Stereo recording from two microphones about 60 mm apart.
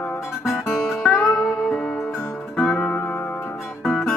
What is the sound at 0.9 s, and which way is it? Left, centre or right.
Music, centre.